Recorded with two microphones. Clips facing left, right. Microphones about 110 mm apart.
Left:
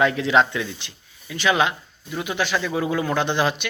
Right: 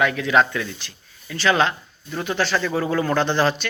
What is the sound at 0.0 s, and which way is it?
Speech, 25° left (ahead or behind).